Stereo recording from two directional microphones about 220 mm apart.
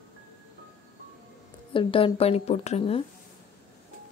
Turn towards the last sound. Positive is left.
turn(degrees=25)  # may be behind; listen again after turning